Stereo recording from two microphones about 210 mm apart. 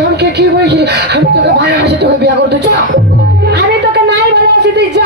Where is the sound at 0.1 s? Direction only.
50° right (ahead or behind).